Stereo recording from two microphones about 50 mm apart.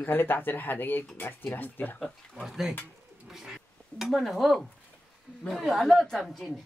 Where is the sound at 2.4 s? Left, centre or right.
Centre.